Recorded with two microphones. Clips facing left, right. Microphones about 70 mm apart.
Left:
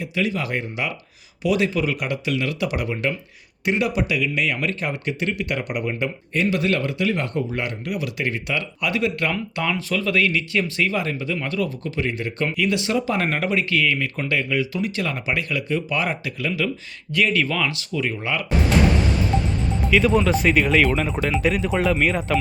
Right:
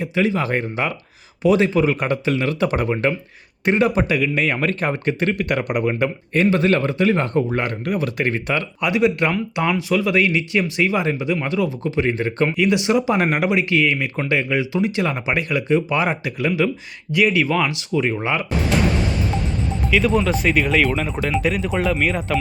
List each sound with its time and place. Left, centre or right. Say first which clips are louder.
0.0 s speech: right 4 dB; right
6.0 s speech: right 5 dB; right
8.8 s speech: right 5 dB; right
12.5 s speech: right 3 dB; right
17.1 s speech: right 3 dB; centre
18.0 s speech: right 2 dB; right
19.9 s speech: even; centre